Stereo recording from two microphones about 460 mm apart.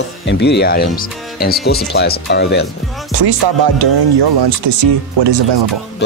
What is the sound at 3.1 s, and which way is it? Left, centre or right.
Speech, right.